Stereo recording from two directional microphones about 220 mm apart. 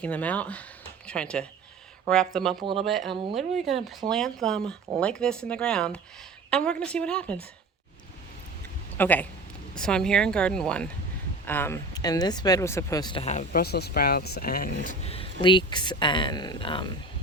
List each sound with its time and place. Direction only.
0.0 s speech: 5° left (ahead or behind)
9.0 s speech: 10° left (ahead or behind); by 13.6 s 30° left (ahead or behind)
13.6 s speech: 45° left (ahead or behind)
14.8 s speech: 25° left (ahead or behind)